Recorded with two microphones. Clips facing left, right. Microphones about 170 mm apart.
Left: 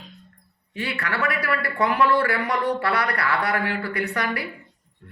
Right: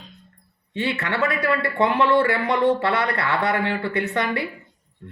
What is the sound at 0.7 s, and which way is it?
Speech, 25° right (ahead or behind).